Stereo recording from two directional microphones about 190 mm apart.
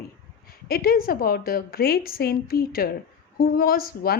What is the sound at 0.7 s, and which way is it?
Speech, 50° left (ahead or behind).